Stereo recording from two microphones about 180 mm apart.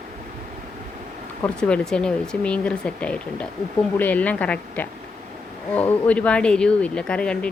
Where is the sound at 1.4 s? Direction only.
5° left (ahead or behind).